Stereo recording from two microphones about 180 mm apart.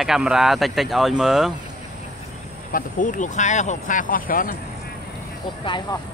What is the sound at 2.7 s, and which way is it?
Speech, 45° left (ahead or behind).